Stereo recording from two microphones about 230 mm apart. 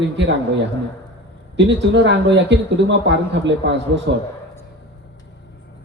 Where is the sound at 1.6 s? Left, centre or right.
Right.